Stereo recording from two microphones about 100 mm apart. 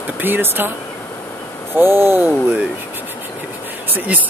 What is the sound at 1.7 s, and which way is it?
Speech, 25° right (ahead or behind).